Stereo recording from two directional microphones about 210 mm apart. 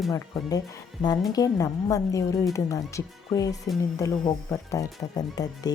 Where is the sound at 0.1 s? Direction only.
15° left (ahead or behind).